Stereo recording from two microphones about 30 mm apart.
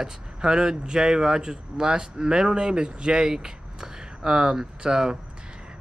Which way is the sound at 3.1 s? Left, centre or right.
Right.